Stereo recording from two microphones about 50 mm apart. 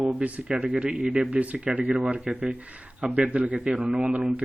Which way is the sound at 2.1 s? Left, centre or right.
Centre.